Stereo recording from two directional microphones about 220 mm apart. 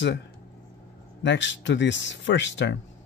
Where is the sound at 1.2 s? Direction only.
55° left (ahead or behind).